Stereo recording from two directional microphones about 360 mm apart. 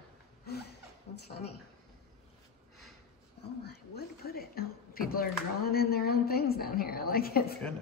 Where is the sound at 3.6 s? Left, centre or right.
Left.